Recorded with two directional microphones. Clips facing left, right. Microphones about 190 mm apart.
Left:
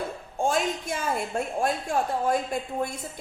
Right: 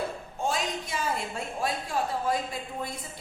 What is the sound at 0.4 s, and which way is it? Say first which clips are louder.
A woman's voice: left 5 dB; 50° left (ahead or behind).